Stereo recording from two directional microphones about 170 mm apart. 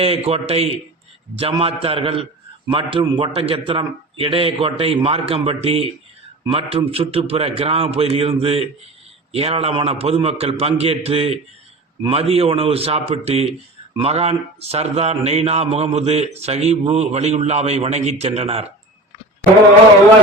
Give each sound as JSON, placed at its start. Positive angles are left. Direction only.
{"t": 0.0, "sound": "speech", "side_deg": -35}